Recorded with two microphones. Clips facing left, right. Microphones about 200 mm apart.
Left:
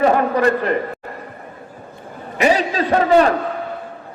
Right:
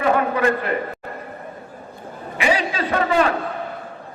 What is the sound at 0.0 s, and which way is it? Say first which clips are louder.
Speech: left 3 dB; 40° left (ahead or behind).